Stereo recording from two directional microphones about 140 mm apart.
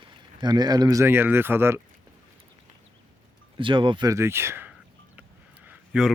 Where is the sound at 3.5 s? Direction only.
35° right (ahead or behind).